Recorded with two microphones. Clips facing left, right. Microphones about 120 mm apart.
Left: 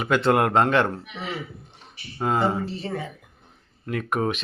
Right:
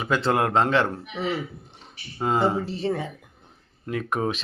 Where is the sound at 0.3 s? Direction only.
5° left (ahead or behind).